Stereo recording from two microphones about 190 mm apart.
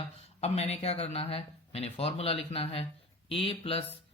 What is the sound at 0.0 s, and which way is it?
Speech, 30° left (ahead or behind).